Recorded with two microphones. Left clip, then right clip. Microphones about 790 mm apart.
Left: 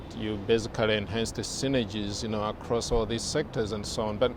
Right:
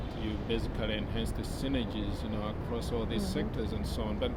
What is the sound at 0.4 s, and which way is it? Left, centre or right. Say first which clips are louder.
Speech: left 11 dB; left.